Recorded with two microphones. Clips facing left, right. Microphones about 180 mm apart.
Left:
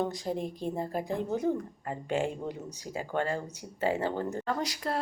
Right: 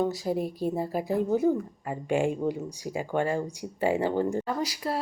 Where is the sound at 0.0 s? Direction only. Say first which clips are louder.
Right 4 dB; 5° right (ahead or behind).